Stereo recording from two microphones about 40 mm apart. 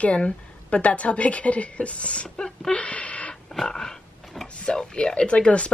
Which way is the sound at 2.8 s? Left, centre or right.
Left.